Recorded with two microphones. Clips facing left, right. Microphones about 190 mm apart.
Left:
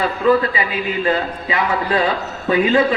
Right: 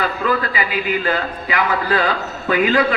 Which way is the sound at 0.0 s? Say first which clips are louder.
Left 5 dB; 25° left (ahead or behind).